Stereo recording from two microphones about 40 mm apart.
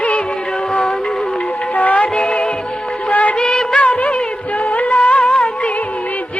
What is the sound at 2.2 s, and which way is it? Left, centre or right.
Music, left.